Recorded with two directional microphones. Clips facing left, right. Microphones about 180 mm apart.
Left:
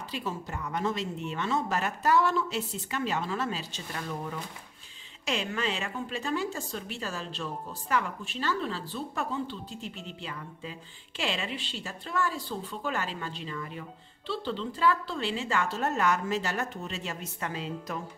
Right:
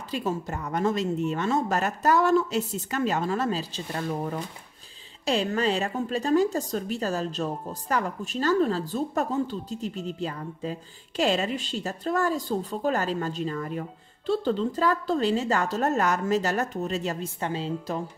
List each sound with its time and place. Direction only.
0.1 s a woman's voice: 45° right (ahead or behind)